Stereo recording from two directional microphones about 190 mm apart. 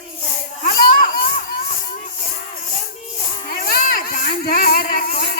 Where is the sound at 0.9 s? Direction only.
45° left (ahead or behind).